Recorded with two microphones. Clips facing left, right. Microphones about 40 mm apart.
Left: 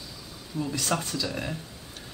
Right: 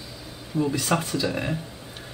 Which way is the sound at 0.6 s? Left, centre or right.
Centre.